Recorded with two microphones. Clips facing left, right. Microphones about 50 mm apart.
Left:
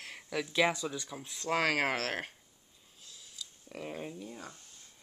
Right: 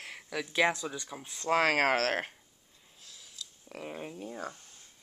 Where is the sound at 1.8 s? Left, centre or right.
Right.